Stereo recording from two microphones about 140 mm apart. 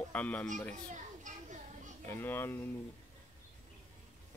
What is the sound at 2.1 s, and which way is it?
Speech, 15° left (ahead or behind).